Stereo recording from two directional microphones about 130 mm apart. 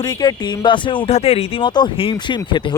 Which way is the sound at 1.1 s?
50° left (ahead or behind).